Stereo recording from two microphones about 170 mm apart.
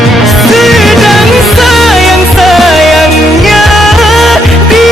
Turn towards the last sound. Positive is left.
turn(degrees=0)  # may be behind; listen again after turning